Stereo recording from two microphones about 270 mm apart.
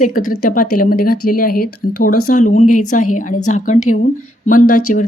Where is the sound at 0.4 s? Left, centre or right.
Left.